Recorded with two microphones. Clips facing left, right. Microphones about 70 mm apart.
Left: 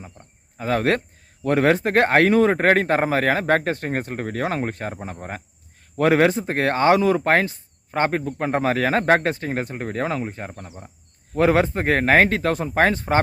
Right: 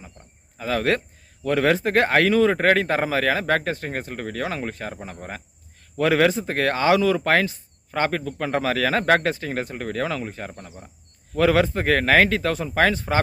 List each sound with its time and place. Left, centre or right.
0.0 s a sound: left
1.5 s speech: left
10.5 s speech: centre
11.3 s speech: left